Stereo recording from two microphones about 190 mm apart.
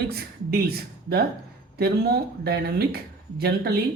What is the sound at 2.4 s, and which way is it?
Speech, 55° right (ahead or behind).